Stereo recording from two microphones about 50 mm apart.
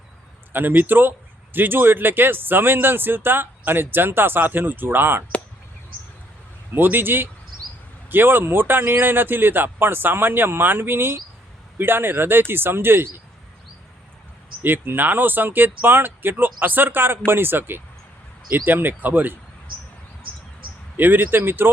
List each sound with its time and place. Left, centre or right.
0.5 s speech: right
6.7 s speech: right
14.6 s speech: right
20.9 s speech: right